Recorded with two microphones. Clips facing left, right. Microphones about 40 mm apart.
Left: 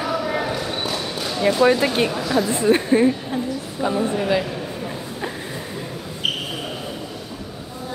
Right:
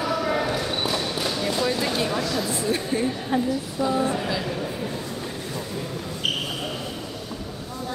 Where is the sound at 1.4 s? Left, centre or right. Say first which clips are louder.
Left 11 dB; left.